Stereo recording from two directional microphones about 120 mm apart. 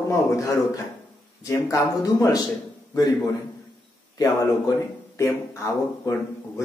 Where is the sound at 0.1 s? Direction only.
25° left (ahead or behind).